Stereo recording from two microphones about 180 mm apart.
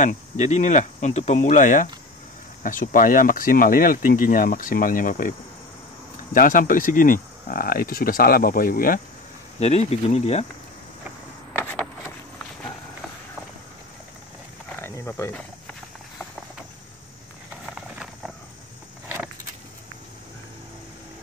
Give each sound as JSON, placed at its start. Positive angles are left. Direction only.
{"t": 0.0, "sound": "speech", "side_deg": 40}
{"t": 6.3, "sound": "speech", "side_deg": 50}
{"t": 9.6, "sound": "speech", "side_deg": 35}
{"t": 11.5, "sound": "vehicle", "side_deg": 10}
{"t": 14.8, "sound": "cricket", "side_deg": 15}
{"t": 17.7, "sound": "horse", "side_deg": -5}